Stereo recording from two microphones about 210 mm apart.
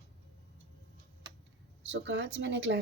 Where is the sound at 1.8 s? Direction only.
60° right (ahead or behind).